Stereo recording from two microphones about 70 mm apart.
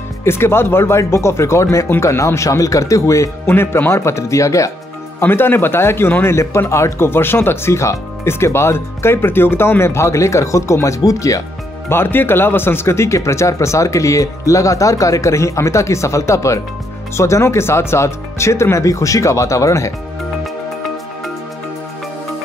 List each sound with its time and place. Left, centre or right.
0.2 s speech: left
3.4 s speech: left
5.2 s speech: left
11.9 s speech: left